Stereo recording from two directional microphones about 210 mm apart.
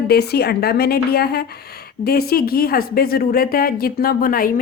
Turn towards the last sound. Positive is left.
turn(degrees=40)  # may be behind; listen again after turning